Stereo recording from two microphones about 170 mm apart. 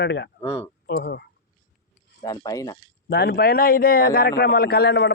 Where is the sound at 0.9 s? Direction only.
75° left (ahead or behind).